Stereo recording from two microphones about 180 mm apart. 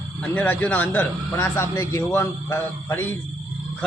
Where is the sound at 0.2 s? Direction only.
10° left (ahead or behind).